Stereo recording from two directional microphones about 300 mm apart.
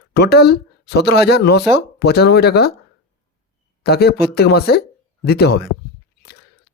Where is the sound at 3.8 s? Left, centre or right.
Left.